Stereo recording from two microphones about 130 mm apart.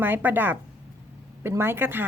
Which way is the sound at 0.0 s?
15° right (ahead or behind).